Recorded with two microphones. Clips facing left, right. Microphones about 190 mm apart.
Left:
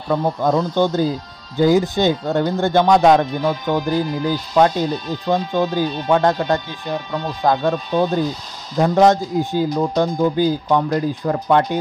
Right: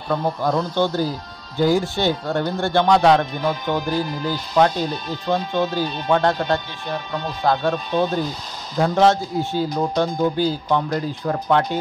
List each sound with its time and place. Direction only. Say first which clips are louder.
0.1 s speech: left 3 dB; 20° left (ahead or behind)